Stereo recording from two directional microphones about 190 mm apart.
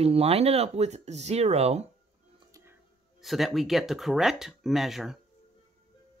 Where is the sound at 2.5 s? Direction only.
15° right (ahead or behind).